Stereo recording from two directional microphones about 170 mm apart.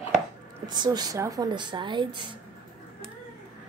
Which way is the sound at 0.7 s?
25° right (ahead or behind).